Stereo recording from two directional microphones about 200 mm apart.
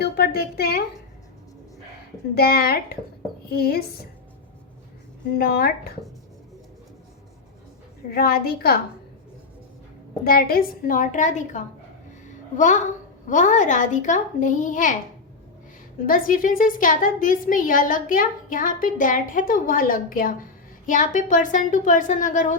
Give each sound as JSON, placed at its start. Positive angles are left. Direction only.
{"t": 0.0, "sound": "a woman's voice", "side_deg": 50}
{"t": 2.3, "sound": "a woman's voice", "side_deg": 50}
{"t": 5.4, "sound": "a woman's voice", "side_deg": 50}
{"t": 8.1, "sound": "a woman's voice", "side_deg": 50}
{"t": 10.2, "sound": "a woman's voice", "side_deg": 50}
{"t": 16.0, "sound": "a woman's voice", "side_deg": 45}